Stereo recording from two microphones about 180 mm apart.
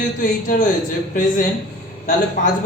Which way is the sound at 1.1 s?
45° left (ahead or behind).